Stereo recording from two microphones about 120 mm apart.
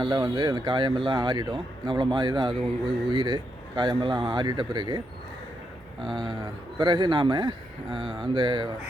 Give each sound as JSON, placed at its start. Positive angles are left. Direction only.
{"t": 0.0, "sound": "speech", "side_deg": -35}
{"t": 6.1, "sound": "speech", "side_deg": -40}